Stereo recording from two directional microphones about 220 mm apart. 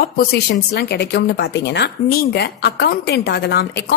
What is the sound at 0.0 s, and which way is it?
Speech, 45° left (ahead or behind).